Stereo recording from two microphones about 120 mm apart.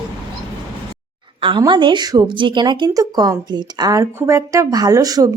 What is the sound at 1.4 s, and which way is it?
A woman's voice, 45° right (ahead or behind).